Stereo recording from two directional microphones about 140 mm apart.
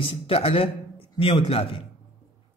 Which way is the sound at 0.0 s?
40° left (ahead or behind).